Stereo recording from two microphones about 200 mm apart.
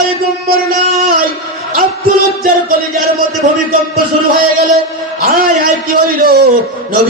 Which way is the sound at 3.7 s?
45° right (ahead or behind).